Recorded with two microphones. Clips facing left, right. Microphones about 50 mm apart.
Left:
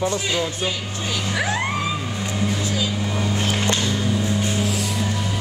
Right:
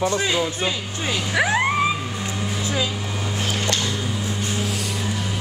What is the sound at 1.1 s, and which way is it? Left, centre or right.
Vehicle, right.